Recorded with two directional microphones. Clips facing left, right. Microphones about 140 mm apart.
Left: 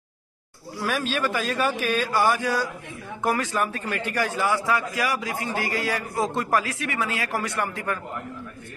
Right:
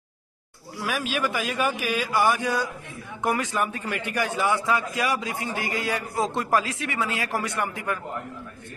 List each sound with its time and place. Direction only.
0.8 s a man's voice: 10° right (ahead or behind)